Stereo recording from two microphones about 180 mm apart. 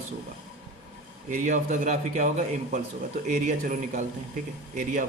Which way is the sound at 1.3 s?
45° right (ahead or behind).